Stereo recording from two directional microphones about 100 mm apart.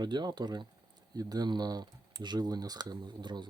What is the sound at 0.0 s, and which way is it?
Speech, 45° right (ahead or behind).